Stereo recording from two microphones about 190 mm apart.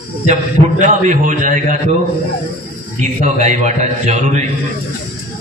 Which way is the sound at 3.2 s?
40° right (ahead or behind).